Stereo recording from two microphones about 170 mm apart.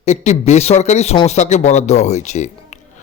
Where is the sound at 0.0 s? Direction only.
40° left (ahead or behind).